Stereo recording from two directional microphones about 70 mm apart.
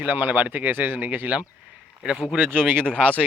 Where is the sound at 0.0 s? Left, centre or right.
Right.